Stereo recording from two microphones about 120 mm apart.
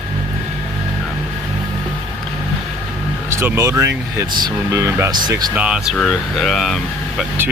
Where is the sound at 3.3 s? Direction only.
20° right (ahead or behind).